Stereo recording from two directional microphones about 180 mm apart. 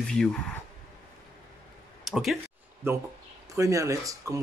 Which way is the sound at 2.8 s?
15° right (ahead or behind).